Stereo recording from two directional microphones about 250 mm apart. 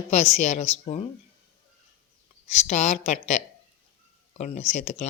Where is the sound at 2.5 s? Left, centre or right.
Left.